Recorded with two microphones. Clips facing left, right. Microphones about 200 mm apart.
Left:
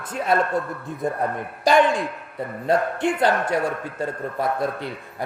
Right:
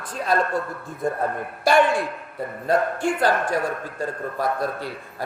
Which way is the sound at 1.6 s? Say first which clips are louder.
Left 1 dB; 15° left (ahead or behind).